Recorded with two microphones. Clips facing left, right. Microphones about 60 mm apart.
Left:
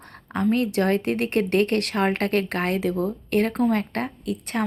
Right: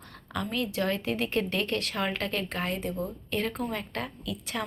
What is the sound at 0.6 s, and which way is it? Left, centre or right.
A woman's voice, left.